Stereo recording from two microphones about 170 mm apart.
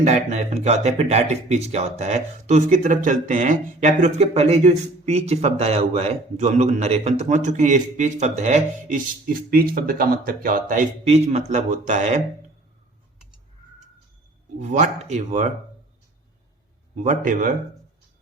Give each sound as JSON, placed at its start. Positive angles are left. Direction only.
{"t": 0.0, "sound": "speech", "side_deg": -40}
{"t": 9.5, "sound": "speech", "side_deg": -60}
{"t": 14.6, "sound": "speech", "side_deg": -45}
{"t": 16.9, "sound": "speech", "side_deg": -45}